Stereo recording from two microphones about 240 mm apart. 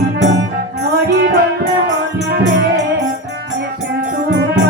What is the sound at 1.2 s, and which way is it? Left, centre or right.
Music, right.